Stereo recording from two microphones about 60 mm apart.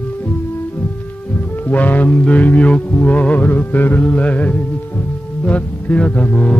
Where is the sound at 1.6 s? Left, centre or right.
Left.